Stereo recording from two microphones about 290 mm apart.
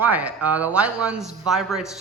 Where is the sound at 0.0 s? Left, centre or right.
Centre.